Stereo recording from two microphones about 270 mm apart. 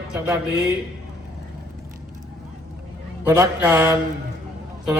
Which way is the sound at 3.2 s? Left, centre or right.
Centre.